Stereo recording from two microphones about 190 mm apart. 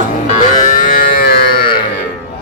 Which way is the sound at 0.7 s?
45° left (ahead or behind).